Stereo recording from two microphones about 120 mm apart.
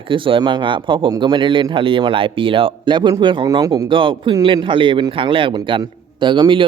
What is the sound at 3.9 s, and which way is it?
Speech, 45° right (ahead or behind).